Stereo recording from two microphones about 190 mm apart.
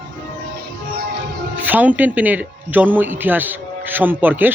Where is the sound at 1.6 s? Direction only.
10° right (ahead or behind).